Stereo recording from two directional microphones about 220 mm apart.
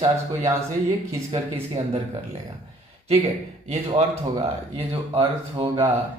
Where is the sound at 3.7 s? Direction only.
30° right (ahead or behind).